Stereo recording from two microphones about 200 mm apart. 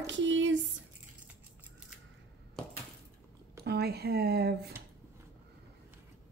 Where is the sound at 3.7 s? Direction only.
55° right (ahead or behind).